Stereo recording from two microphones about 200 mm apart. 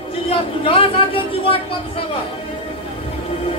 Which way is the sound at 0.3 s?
25° left (ahead or behind).